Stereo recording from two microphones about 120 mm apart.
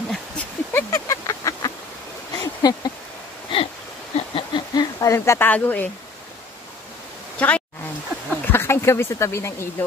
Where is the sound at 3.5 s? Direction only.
45° left (ahead or behind).